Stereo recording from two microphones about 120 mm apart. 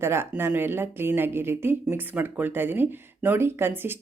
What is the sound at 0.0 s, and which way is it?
A woman's voice, 20° right (ahead or behind).